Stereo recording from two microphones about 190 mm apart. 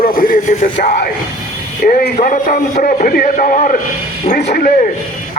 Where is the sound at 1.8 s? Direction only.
55° left (ahead or behind).